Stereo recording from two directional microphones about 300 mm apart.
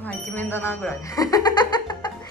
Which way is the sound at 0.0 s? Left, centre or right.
Centre.